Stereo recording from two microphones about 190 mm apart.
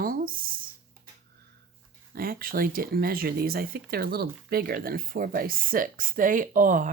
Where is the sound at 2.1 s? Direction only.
50° right (ahead or behind).